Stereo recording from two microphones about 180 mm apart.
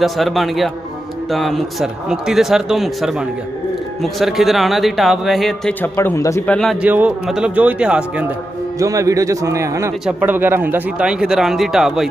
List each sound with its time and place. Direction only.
0.0 s speech: centre (ahead or behind); by 6.5 s 15° left (ahead or behind)
6.5 s speech: centre (ahead or behind)
8.7 s speech: 20° right (ahead or behind)